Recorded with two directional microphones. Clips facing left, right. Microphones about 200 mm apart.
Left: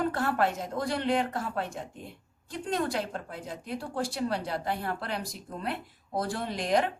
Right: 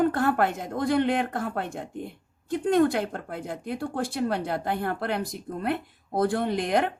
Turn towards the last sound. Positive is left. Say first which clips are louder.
# right 3 dB
turn(degrees=-55)  # may be behind; listen again after turning